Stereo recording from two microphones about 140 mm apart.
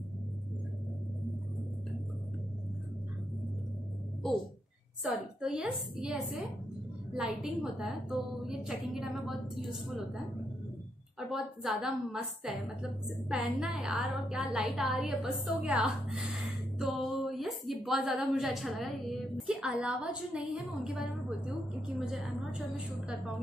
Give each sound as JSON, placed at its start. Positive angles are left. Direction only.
{"t": 5.0, "sound": "a woman's voice", "side_deg": -5}